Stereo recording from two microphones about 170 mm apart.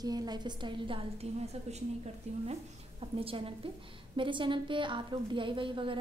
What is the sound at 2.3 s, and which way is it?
A woman's voice, 40° right (ahead or behind).